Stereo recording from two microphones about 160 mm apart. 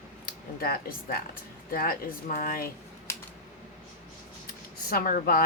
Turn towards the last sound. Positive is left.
turn(degrees=65)  # may be behind; listen again after turning